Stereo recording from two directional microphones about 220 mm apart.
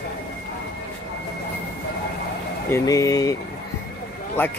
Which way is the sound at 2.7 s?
15° left (ahead or behind).